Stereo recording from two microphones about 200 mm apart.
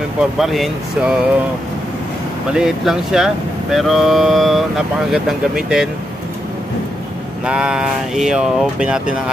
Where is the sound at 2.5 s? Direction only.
Centre (ahead or behind).